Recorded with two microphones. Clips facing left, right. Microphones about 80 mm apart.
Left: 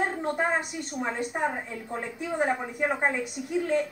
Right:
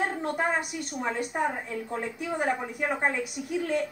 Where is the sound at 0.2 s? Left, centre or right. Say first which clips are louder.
Left 1 dB; centre.